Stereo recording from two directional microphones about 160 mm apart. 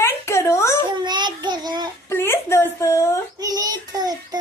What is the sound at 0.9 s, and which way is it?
Child singing, 30° right (ahead or behind).